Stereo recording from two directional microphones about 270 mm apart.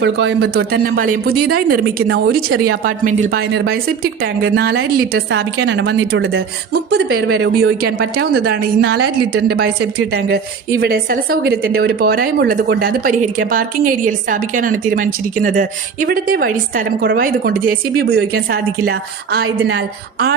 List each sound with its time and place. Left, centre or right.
0.0 s a woman's voice: right
3.0 s a woman's voice: right